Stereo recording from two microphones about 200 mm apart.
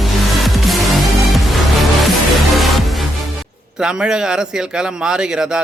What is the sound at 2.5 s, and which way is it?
A man's voice, centre (ahead or behind).